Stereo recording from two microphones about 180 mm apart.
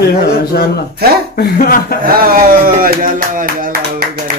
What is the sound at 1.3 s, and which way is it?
Speech, 55° left (ahead or behind).